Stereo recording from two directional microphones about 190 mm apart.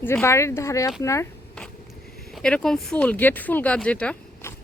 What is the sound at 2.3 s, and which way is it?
Speech, 5° left (ahead or behind).